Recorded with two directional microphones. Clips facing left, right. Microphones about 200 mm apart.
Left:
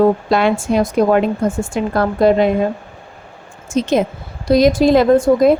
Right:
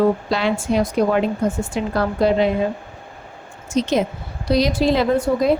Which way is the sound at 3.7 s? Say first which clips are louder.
Left 3 dB; 50° left (ahead or behind).